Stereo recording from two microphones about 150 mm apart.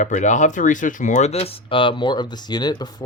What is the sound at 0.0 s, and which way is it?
Speech, 55° left (ahead or behind).